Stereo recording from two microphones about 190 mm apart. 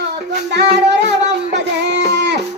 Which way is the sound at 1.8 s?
65° right (ahead or behind).